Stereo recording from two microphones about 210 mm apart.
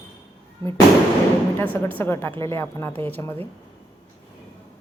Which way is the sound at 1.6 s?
5° left (ahead or behind).